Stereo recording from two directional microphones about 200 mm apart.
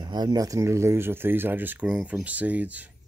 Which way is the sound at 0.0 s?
20° right (ahead or behind).